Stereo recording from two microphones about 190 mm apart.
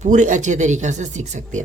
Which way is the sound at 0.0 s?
40° right (ahead or behind).